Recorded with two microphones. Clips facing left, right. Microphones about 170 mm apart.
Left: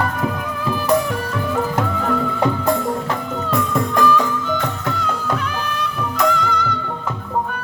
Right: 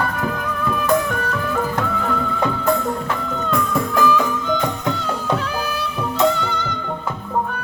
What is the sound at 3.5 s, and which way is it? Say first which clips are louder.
Music: left 1 dB; centre (ahead or behind).